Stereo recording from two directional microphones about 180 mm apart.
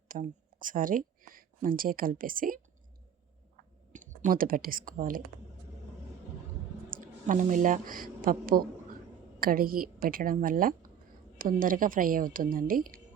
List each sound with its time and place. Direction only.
0.1 s speech: 50° right (ahead or behind)
3.9 s speech: 45° right (ahead or behind)
6.9 s a woman's voice: 45° right (ahead or behind)